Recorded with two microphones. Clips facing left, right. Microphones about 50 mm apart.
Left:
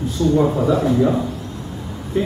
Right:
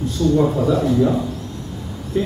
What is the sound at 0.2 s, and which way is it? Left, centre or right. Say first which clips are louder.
Speech: even; centre.